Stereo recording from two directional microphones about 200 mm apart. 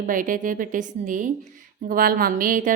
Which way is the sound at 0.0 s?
40° right (ahead or behind).